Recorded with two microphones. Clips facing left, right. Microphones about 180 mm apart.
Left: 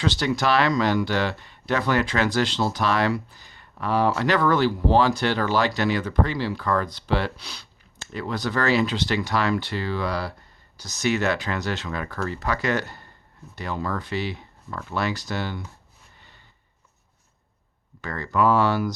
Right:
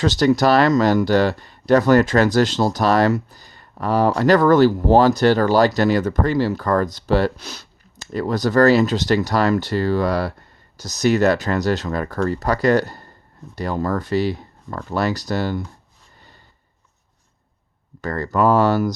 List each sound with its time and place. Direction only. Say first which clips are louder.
0.0 s speech: right 7 dB; 45° right (ahead or behind)
18.0 s speech: right 4 dB; 40° right (ahead or behind)